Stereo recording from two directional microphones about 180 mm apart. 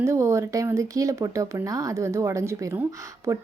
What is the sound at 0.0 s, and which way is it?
A woman's voice, 15° right (ahead or behind).